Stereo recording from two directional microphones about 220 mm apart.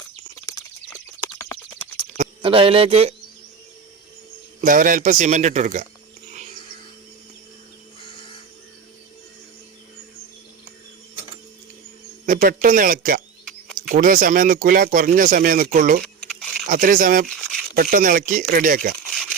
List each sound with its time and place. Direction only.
2.1 s speech: 30° right (ahead or behind)
4.6 s speech: 40° right (ahead or behind)
12.2 s speech: 40° right (ahead or behind)
17.3 s a sound: centre (ahead or behind)
17.7 s speech: 40° right (ahead or behind)